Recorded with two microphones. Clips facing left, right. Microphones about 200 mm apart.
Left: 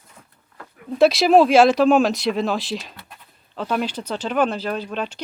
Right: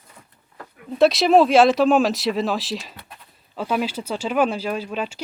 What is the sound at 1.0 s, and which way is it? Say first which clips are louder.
Speech: left 1 dB; centre (ahead or behind).